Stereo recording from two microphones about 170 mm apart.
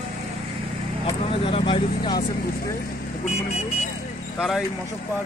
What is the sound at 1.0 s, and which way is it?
Speech, 30° left (ahead or behind).